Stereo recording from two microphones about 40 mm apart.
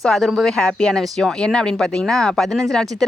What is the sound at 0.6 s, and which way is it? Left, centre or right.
Speech, left.